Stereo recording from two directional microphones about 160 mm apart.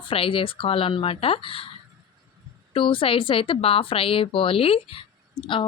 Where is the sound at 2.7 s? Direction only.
35° left (ahead or behind).